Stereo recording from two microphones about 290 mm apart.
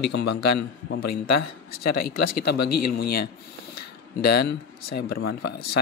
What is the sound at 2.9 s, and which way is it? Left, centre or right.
Speech, left.